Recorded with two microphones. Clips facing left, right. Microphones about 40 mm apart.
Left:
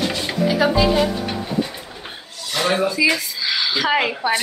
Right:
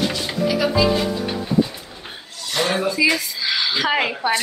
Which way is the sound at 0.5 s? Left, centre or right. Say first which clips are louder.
Left 1 dB; left.